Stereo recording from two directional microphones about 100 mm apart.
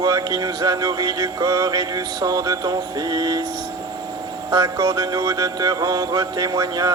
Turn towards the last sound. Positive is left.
turn(degrees=-40)  # may be behind; listen again after turning